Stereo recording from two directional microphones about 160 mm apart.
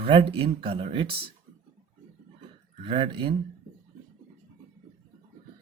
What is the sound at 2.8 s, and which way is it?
Speech, 35° right (ahead or behind).